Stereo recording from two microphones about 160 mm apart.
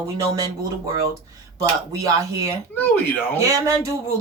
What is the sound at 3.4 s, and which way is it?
Speech, 20° right (ahead or behind).